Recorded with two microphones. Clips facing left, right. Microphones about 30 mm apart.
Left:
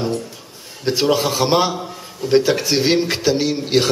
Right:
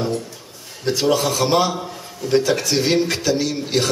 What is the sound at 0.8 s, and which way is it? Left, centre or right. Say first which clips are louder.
A man's voice: left 1 dB; left.